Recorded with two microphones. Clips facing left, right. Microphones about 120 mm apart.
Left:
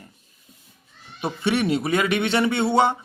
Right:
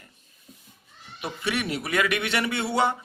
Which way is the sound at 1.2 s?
30° left (ahead or behind).